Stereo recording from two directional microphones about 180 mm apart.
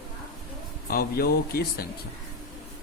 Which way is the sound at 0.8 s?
55° left (ahead or behind).